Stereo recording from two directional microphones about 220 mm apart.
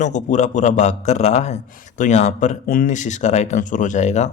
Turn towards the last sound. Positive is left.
turn(degrees=30)  # may be behind; listen again after turning